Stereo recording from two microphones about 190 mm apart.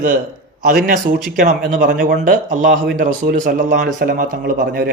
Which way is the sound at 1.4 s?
50° right (ahead or behind).